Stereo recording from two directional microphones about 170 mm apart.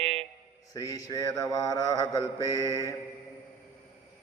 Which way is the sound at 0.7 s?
20° left (ahead or behind).